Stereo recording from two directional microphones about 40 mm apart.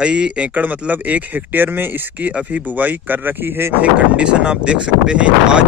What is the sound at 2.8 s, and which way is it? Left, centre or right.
Speech, right.